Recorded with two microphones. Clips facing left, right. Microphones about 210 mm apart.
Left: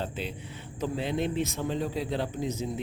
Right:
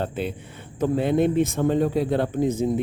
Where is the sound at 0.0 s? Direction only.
50° right (ahead or behind).